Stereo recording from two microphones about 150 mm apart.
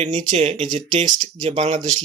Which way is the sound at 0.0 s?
55° right (ahead or behind).